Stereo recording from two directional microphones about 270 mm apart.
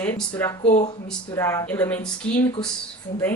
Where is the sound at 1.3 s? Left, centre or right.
Centre.